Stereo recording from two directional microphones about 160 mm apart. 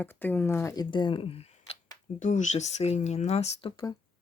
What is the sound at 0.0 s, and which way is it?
Speech, 10° left (ahead or behind).